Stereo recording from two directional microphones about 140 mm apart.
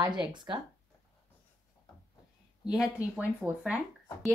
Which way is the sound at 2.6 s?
5° right (ahead or behind).